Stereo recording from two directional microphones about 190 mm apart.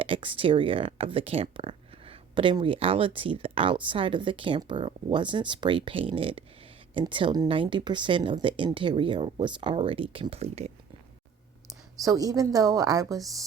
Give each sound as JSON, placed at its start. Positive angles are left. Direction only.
{"t": 0.0, "sound": "speech", "side_deg": -30}
{"t": 12.0, "sound": "speech", "side_deg": -20}